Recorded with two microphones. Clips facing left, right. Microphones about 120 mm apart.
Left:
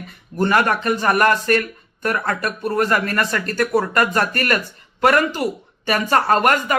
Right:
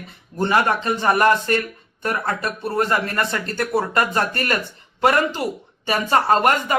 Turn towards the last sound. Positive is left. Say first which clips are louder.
# left 1 dB
turn(degrees=-20)  # may be behind; listen again after turning